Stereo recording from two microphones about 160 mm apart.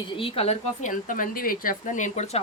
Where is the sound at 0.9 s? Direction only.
60° left (ahead or behind).